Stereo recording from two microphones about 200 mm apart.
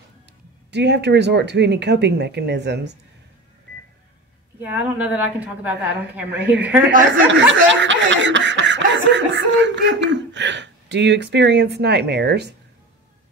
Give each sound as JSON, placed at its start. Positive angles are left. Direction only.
{"t": 0.7, "sound": "snicker", "side_deg": -60}
{"t": 4.6, "sound": "a woman's voice", "side_deg": -10}
{"t": 7.1, "sound": "snicker", "side_deg": -65}